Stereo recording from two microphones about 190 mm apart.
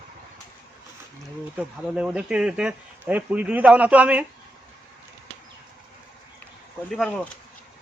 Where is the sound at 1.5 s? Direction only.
5° right (ahead or behind).